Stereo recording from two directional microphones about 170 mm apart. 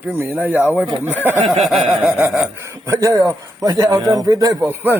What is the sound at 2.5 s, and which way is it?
A man's voice, 15° right (ahead or behind).